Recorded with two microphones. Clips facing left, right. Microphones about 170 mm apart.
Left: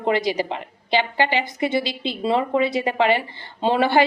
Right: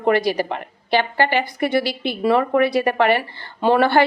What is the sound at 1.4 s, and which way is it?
A woman's voice, 20° left (ahead or behind).